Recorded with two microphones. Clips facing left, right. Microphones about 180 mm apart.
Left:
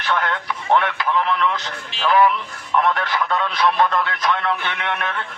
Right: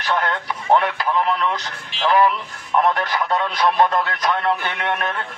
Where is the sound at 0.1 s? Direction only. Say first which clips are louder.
Right 1 dB; 30° right (ahead or behind).